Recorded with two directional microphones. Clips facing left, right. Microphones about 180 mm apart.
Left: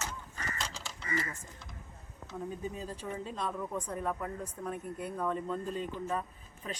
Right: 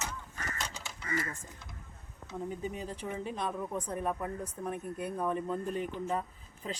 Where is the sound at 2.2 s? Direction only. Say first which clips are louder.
Right 1 dB; 20° right (ahead or behind).